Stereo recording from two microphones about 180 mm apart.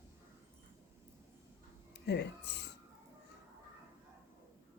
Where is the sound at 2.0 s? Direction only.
70° left (ahead or behind).